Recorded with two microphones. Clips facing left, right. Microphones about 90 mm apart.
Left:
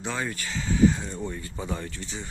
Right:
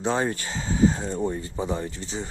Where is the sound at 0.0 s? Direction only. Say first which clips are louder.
Right 6 dB; 35° right (ahead or behind).